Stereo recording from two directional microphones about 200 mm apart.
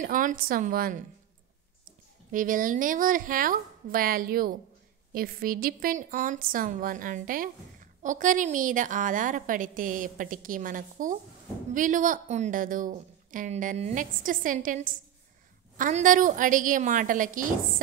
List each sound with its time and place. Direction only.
0.0 s a woman's voice: 40° right (ahead or behind)
2.3 s a woman's voice: 40° right (ahead or behind)